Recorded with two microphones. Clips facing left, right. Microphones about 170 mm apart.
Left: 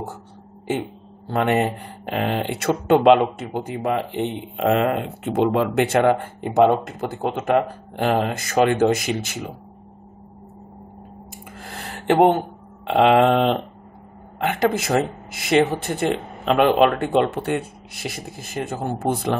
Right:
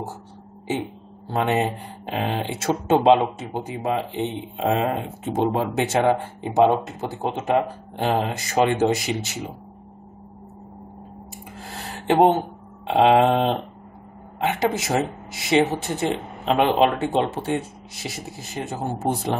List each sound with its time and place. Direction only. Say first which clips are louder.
1.3 s speech: left 2 dB; 60° left (ahead or behind)
11.5 s a sound: even; 55° left (ahead or behind)
14.4 s speech: left 2 dB; 55° left (ahead or behind)